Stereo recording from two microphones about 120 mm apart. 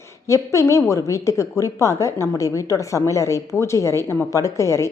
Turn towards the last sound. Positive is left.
turn(degrees=25)  # may be behind; listen again after turning